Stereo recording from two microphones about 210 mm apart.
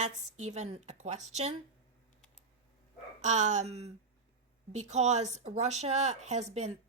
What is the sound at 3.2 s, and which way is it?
Speech, 35° right (ahead or behind).